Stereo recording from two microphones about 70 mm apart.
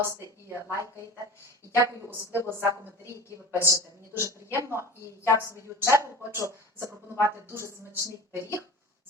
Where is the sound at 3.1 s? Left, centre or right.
Left.